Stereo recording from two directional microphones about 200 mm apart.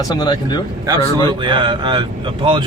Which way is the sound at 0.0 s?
20° left (ahead or behind).